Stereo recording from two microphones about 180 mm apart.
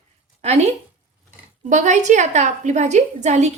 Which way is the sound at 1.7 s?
40° right (ahead or behind).